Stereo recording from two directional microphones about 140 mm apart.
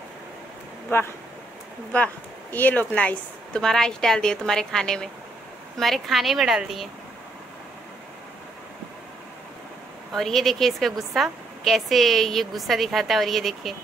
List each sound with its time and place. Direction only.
0.8 s speech: 15° left (ahead or behind)
2.5 s a woman's voice: 10° left (ahead or behind)
10.1 s a woman's voice: centre (ahead or behind)